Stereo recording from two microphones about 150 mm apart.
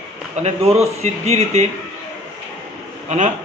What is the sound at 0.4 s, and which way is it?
Speech, 45° right (ahead or behind).